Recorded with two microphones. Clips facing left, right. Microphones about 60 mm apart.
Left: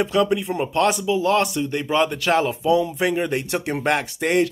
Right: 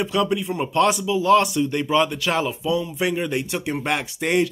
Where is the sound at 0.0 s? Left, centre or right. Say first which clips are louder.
Left 2 dB; left.